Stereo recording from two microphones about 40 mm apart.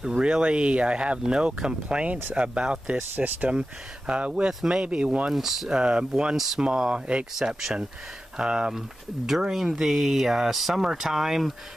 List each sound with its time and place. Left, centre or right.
0.1 s speech: right
5.3 s speech: centre
5.7 s speech: right
6.3 s speech: centre
6.6 s speech: right
7.3 s speech: centre
8.4 s speech: right